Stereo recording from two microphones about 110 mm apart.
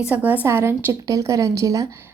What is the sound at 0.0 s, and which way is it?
A woman's voice, 15° right (ahead or behind).